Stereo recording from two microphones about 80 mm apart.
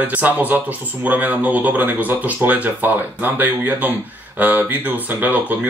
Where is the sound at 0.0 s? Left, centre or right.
Centre.